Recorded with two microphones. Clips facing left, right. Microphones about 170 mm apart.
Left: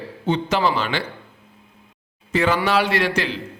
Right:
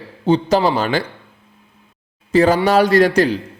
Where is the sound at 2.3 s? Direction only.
35° right (ahead or behind).